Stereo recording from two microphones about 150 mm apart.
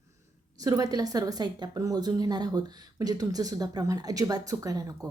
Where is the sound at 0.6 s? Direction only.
25° right (ahead or behind).